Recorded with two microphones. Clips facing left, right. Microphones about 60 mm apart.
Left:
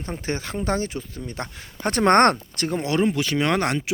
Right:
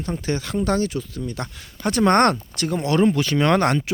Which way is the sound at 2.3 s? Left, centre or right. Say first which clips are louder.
Right 1 dB; left.